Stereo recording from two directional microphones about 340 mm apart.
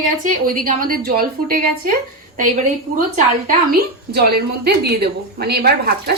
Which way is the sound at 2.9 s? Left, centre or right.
Right.